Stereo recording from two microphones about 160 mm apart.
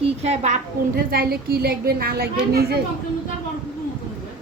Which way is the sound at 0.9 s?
70° right (ahead or behind).